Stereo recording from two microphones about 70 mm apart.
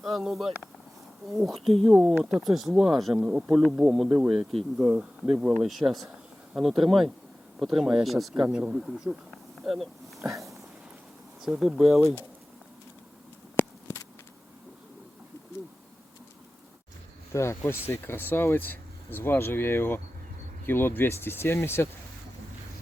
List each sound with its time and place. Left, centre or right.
0.0 s speech: centre
5.6 s speech: centre
8.4 s speech: centre
10.2 s a sound: right
11.4 s speech: centre
13.6 s a sound: left
17.3 s speech: left